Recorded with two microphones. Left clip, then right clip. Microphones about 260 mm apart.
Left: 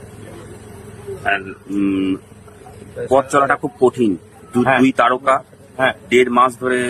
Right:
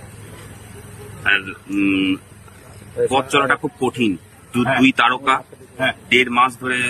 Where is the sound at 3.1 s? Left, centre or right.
Left.